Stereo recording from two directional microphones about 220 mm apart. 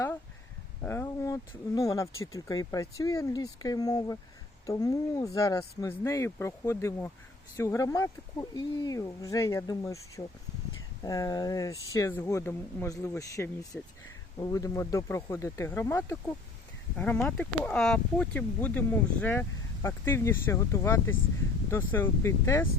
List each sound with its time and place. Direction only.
0.9 s speech: 10° left (ahead or behind)